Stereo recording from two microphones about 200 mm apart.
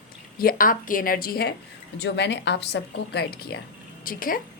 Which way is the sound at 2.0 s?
60° left (ahead or behind).